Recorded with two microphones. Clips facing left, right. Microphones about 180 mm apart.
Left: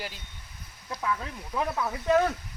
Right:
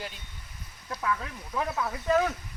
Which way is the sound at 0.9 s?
10° left (ahead or behind).